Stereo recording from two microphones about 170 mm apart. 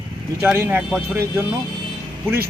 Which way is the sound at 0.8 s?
5° right (ahead or behind).